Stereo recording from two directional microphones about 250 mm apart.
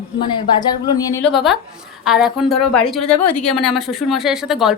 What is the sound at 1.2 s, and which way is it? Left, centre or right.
A woman's voice, centre.